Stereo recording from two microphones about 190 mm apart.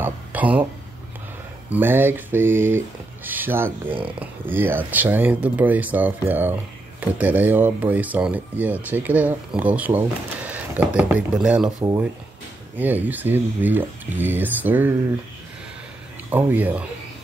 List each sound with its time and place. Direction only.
0.0 s a sound: 10° right (ahead or behind)
1.7 s speech: 10° right (ahead or behind)
3.9 s speech: 30° right (ahead or behind)
4.2 s speech: 10° right (ahead or behind)
12.7 s speech: 10° right (ahead or behind)
16.3 s speech: 10° right (ahead or behind)